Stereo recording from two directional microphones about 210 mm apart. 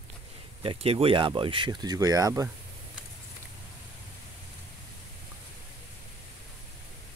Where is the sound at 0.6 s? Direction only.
25° right (ahead or behind).